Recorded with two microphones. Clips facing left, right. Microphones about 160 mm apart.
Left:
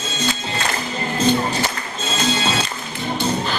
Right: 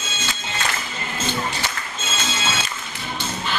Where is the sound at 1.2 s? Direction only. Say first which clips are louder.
Left 8 dB; 35° left (ahead or behind).